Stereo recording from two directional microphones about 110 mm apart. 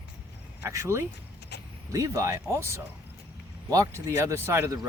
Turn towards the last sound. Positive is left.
turn(degrees=-25)  # may be behind; listen again after turning